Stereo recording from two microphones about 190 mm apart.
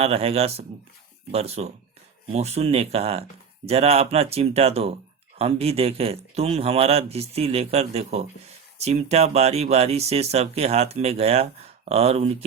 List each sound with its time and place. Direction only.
0.0 s speech: 30° right (ahead or behind)